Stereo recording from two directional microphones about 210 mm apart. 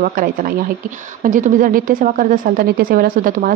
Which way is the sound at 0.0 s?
40° right (ahead or behind).